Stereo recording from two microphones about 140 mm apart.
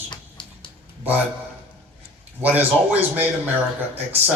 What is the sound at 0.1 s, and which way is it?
Music, 35° left (ahead or behind).